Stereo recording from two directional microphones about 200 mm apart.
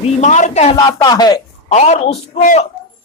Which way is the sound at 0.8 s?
20° left (ahead or behind).